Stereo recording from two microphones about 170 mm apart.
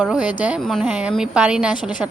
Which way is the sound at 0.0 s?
5° right (ahead or behind).